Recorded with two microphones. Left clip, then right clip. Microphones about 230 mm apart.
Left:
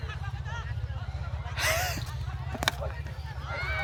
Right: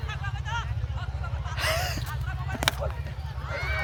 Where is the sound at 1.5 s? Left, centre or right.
Centre.